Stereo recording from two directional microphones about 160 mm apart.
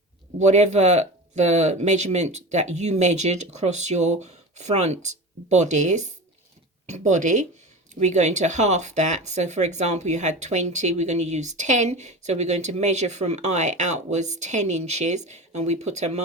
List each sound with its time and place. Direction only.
0.3 s speech: 45° right (ahead or behind)